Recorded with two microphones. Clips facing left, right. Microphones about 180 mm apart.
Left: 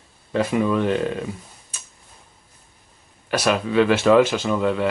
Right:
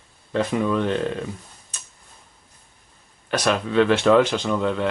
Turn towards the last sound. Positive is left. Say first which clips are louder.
# left 2 dB
turn(degrees=5)  # may be behind; listen again after turning